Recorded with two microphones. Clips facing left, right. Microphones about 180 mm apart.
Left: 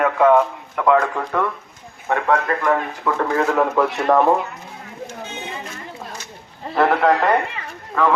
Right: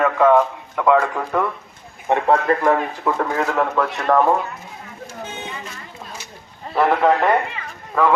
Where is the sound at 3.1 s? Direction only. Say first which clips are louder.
Even; 20° right (ahead or behind).